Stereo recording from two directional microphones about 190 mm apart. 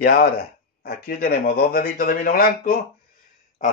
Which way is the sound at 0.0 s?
55° left (ahead or behind).